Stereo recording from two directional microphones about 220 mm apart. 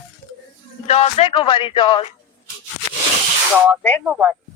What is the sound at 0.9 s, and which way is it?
Speech, 30° left (ahead or behind).